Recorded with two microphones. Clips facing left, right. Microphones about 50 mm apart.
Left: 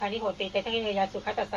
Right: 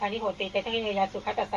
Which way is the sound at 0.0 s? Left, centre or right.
Right.